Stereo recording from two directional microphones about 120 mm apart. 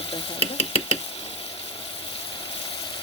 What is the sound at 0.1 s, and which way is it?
Stir, 55° left (ahead or behind).